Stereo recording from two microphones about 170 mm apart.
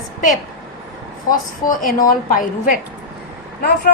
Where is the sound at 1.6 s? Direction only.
50° left (ahead or behind).